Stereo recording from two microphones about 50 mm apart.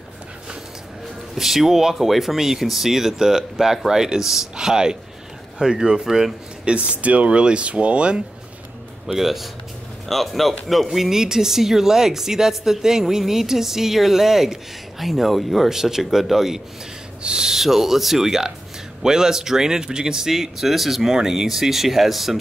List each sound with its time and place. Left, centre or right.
1.3 s speech: centre
6.6 s speech: right
9.0 s speech: centre